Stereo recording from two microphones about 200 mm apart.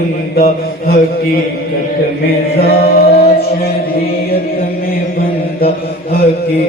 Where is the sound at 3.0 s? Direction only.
50° left (ahead or behind).